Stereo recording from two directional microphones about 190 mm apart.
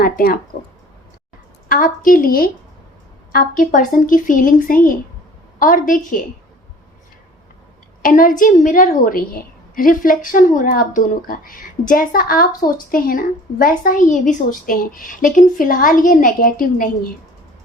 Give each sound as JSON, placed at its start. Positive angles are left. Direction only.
{"t": 0.0, "sound": "a woman's voice", "side_deg": 50}
{"t": 1.6, "sound": "a woman's voice", "side_deg": 45}
{"t": 8.0, "sound": "a woman's voice", "side_deg": 45}